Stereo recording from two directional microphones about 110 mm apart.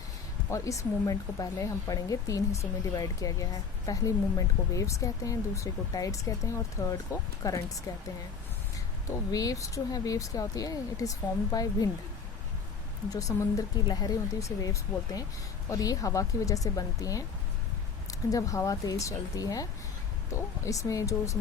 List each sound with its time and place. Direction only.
0.5 s speech: 30° left (ahead or behind)
9.0 s speech: 35° left (ahead or behind)
13.1 s speech: 30° left (ahead or behind)